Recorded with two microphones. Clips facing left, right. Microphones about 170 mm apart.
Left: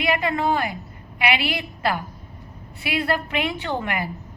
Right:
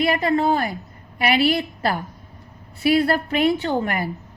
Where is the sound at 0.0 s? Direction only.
40° right (ahead or behind).